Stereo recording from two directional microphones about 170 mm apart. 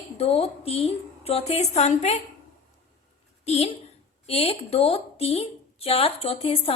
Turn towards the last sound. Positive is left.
turn(degrees=35)  # may be behind; listen again after turning